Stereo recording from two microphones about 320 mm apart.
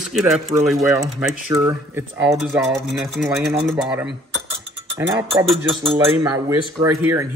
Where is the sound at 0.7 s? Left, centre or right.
Centre.